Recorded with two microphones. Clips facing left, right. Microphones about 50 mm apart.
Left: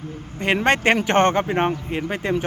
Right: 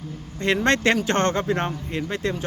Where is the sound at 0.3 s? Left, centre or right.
Left.